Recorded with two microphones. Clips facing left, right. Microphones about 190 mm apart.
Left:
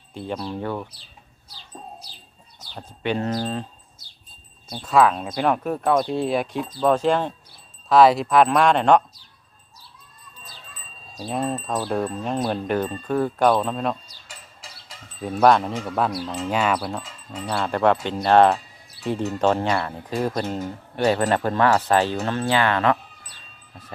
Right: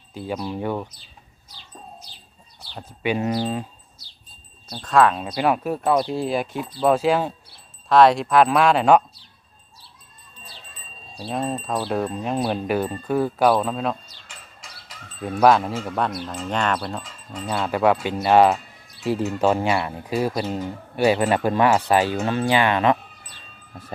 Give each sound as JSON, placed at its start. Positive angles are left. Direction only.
{"t": 0.1, "sound": "speech", "side_deg": -5}
{"t": 2.7, "sound": "speech", "side_deg": -10}
{"t": 4.8, "sound": "speech", "side_deg": 5}
{"t": 11.3, "sound": "speech", "side_deg": 0}
{"t": 14.3, "sound": "a sound", "side_deg": 30}
{"t": 15.4, "sound": "speech", "side_deg": 0}